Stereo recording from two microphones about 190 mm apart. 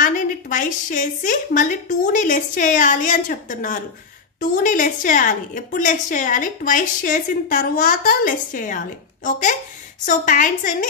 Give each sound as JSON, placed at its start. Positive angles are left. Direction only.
{"t": 0.0, "sound": "a woman's voice", "side_deg": 45}